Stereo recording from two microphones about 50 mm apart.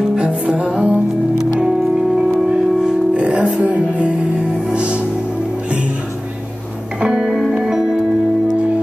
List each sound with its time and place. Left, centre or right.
0.2 s music: right
2.1 s music: centre
7.0 s music: centre